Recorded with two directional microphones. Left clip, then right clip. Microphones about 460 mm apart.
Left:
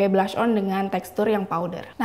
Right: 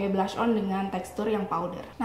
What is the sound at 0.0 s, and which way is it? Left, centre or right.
A woman's voice, left.